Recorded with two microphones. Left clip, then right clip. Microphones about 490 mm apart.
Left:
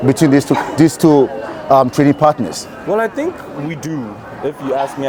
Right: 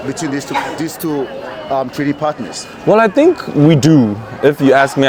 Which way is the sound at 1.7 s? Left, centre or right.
Left.